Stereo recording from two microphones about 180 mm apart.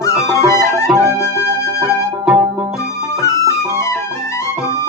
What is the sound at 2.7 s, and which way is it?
Music, 15° left (ahead or behind).